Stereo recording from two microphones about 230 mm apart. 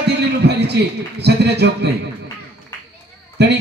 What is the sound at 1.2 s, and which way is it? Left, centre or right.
Speech, right.